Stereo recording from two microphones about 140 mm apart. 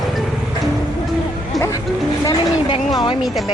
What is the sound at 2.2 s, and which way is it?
Speech, 30° left (ahead or behind).